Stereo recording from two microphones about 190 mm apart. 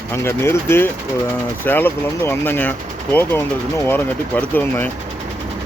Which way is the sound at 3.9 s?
10° left (ahead or behind).